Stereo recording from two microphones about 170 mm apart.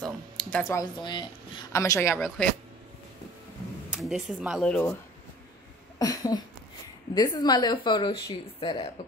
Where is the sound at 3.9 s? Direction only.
Centre (ahead or behind).